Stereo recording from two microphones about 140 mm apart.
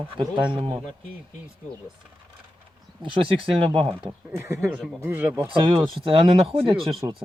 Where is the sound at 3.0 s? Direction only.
35° right (ahead or behind).